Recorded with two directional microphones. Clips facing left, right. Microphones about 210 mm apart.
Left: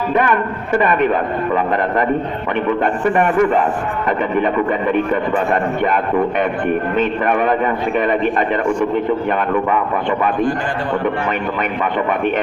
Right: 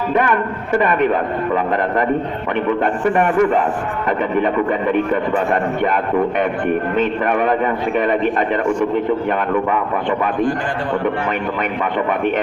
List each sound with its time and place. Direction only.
0.1 s speech: 40° right (ahead or behind)
2.6 s speech: 35° right (ahead or behind)